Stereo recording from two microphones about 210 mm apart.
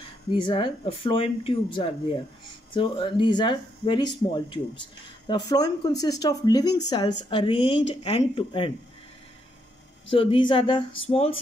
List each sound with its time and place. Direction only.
0.4 s speech: 25° left (ahead or behind)
10.1 s speech: 25° left (ahead or behind)